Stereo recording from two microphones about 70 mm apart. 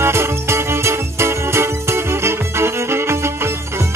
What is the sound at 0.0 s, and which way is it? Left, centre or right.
Music, right.